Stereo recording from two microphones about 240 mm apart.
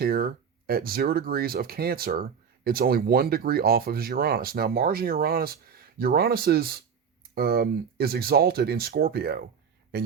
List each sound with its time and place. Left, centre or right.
0.0 s speech: right